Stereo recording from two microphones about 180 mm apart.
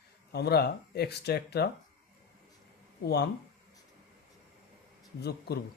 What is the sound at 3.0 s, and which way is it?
Speech, 65° left (ahead or behind).